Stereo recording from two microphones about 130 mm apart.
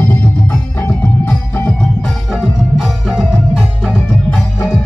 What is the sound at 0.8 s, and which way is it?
Music, 15° left (ahead or behind).